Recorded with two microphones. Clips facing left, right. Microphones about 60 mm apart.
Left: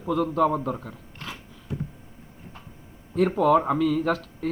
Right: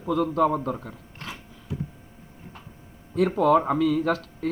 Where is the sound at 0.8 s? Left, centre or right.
Centre.